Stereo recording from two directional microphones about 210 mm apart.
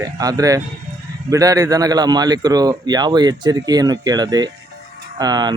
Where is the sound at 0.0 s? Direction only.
15° right (ahead or behind).